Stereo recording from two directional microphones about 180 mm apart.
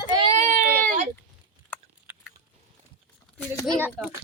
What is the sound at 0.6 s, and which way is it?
Speech, 50° right (ahead or behind).